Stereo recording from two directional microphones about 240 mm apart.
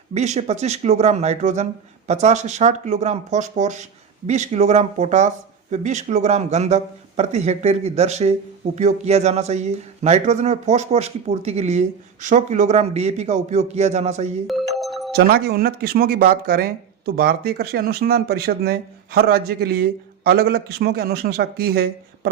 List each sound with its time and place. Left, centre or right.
0.1 s speech: right
14.4 s music: centre
15.1 s speech: right